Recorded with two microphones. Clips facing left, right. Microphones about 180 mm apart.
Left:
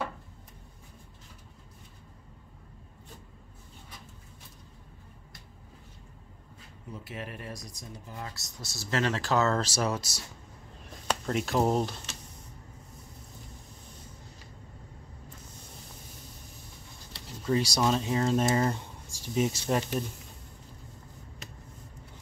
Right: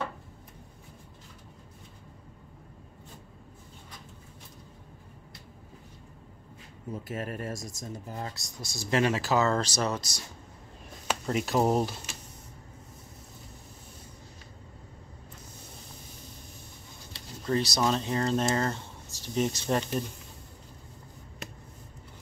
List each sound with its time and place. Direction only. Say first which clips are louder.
6.9 s speech: right 5 dB; 45° right (ahead or behind)
8.4 s speech: right 3 dB; 15° right (ahead or behind); by 10.2 s 5° left (ahead or behind)
11.1 s a sound: even; 5° right (ahead or behind)
11.6 s speech: right 1 dB; 5° right (ahead or behind)
17.5 s speech: even; 10° left (ahead or behind)